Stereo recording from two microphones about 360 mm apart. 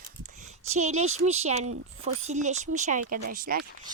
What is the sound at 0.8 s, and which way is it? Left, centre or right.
Speech, centre.